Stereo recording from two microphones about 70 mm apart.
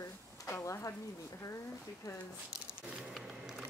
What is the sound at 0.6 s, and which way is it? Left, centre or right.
Speech, left.